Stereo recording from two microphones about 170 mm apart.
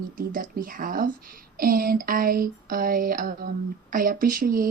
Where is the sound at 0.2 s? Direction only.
55° right (ahead or behind).